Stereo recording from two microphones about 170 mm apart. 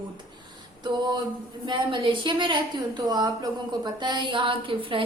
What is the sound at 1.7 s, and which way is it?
Speech, 30° right (ahead or behind).